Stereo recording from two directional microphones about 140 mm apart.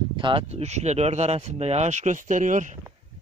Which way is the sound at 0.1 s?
35° right (ahead or behind).